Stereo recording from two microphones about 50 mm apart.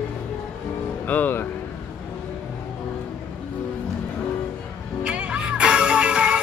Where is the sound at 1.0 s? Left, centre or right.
Left.